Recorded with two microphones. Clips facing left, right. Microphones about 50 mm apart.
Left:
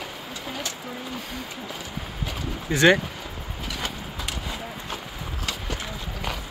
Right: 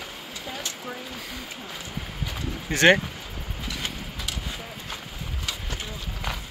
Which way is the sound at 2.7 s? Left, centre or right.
Right.